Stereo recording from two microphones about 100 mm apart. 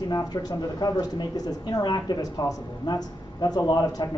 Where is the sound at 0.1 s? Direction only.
40° left (ahead or behind).